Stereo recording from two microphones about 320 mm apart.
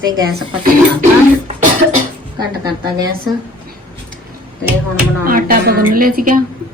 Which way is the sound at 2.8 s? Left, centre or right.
Centre.